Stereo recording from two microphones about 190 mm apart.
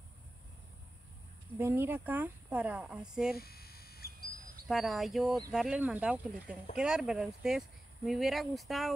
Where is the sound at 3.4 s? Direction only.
55° left (ahead or behind).